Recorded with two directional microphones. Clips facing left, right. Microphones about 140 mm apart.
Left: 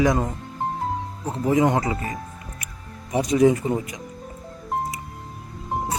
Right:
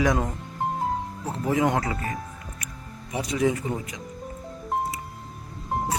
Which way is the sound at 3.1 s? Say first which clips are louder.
Left 7 dB; 40° left (ahead or behind).